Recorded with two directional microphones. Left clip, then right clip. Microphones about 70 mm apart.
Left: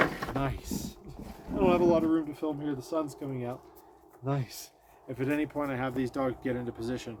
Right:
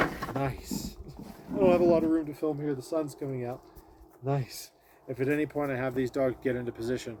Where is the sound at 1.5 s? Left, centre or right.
Left.